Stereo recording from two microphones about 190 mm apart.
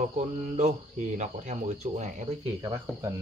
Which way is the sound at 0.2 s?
35° right (ahead or behind).